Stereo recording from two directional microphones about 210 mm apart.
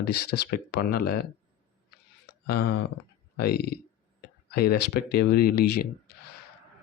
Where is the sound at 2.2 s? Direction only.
50° left (ahead or behind).